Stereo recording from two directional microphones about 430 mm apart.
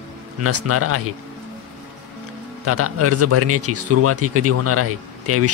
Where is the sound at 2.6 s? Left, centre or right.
Right.